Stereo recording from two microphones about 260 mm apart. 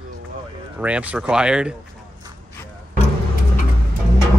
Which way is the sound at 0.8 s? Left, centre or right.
Centre.